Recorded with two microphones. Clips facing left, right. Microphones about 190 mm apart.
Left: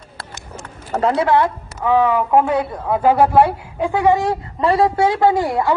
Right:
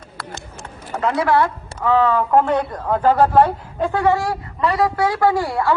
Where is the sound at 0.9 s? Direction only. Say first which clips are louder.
Left 2 dB; 30° left (ahead or behind).